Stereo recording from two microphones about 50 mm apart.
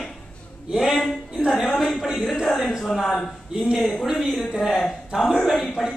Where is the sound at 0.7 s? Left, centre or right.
Centre.